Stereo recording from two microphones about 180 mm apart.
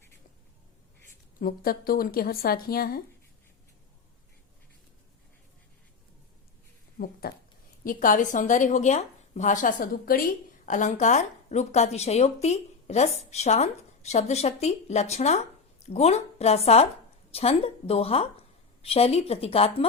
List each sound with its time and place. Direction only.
1.4 s speech: 55° left (ahead or behind)
7.0 s a sound: 55° left (ahead or behind)
7.9 s a woman's voice: 50° left (ahead or behind); by 19.9 s 35° left (ahead or behind)